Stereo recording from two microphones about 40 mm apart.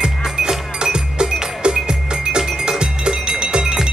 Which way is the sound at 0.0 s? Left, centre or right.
Centre.